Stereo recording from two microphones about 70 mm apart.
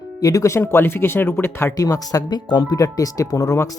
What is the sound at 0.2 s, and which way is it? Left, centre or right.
Speech, left.